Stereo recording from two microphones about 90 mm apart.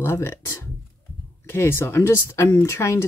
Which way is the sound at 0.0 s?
30° left (ahead or behind).